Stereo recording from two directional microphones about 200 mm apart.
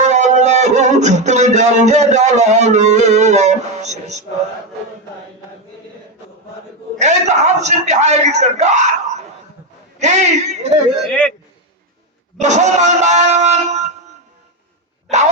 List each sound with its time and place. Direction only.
0.0 s music: 35° right (ahead or behind)
7.0 s speech: 35° right (ahead or behind)
11.1 s a man's voice: 5° left (ahead or behind)
12.4 s speech: 35° right (ahead or behind)